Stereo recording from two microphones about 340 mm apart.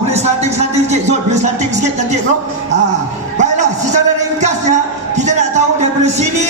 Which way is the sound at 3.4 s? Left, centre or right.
Right.